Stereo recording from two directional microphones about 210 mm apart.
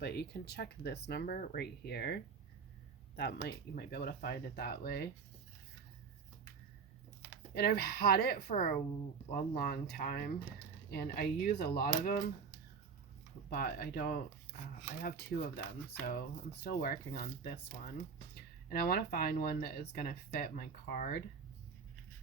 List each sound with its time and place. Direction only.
0.0 s speech: 50° left (ahead or behind)
3.2 s speech: 55° left (ahead or behind)
7.5 s speech: 50° left (ahead or behind)
13.5 s speech: 50° left (ahead or behind)